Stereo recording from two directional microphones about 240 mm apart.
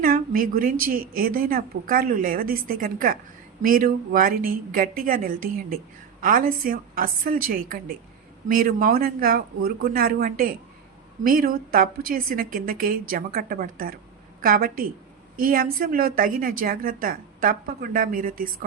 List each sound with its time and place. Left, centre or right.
0.0 s speech: right